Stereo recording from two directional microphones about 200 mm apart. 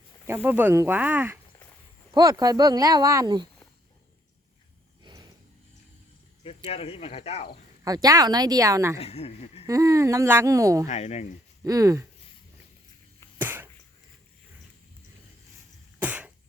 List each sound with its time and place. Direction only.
0.4 s speech: 10° right (ahead or behind)
2.1 s speech: 20° right (ahead or behind)
6.7 s speech: 30° left (ahead or behind)
7.9 s speech: 20° right (ahead or behind)
9.0 s speech: 30° left (ahead or behind)
9.6 s speech: 15° right (ahead or behind)
10.8 s speech: 35° left (ahead or behind)
11.6 s speech: 15° right (ahead or behind)
13.4 s a sound: 10° right (ahead or behind)
16.0 s cough: 5° right (ahead or behind)